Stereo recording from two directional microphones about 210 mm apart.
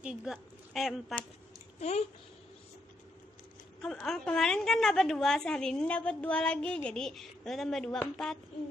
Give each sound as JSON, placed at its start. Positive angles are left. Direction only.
{"t": 0.0, "sound": "a woman's voice", "side_deg": -5}
{"t": 1.8, "sound": "speech", "side_deg": 30}
{"t": 3.8, "sound": "a woman's voice", "side_deg": 5}